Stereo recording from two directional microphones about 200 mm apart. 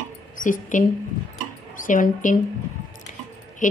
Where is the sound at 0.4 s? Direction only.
40° left (ahead or behind).